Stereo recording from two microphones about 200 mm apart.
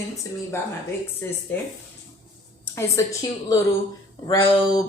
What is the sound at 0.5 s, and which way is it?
Speech, 10° left (ahead or behind).